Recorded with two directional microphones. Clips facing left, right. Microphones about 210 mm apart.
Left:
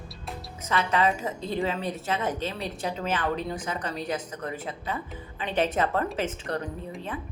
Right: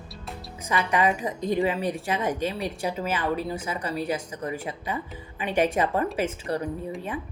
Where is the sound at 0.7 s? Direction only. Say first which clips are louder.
Right 1 dB; 15° right (ahead or behind).